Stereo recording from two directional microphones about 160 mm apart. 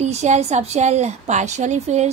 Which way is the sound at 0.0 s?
45° right (ahead or behind).